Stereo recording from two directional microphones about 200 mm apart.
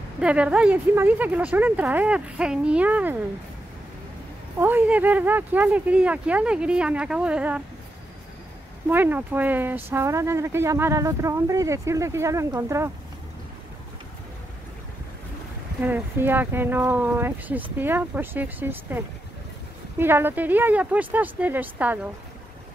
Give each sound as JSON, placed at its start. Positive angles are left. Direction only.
{"t": 0.2, "sound": "speech", "side_deg": -5}
{"t": 4.6, "sound": "speech", "side_deg": -10}
{"t": 8.9, "sound": "speech", "side_deg": -10}
{"t": 15.8, "sound": "speech", "side_deg": -10}